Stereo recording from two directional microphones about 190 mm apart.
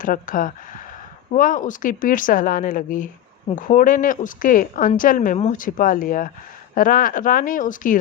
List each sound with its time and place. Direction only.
0.0 s speech: 45° left (ahead or behind)